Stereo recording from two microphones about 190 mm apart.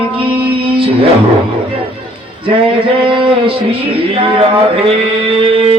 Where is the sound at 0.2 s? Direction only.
25° right (ahead or behind).